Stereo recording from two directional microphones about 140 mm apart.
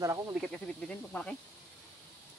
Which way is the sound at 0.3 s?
Centre (ahead or behind).